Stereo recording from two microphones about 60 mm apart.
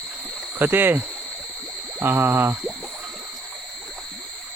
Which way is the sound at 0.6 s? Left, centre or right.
Right.